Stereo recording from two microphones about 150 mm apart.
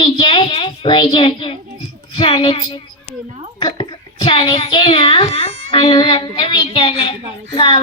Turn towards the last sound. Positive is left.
turn(degrees=35)  # may be behind; listen again after turning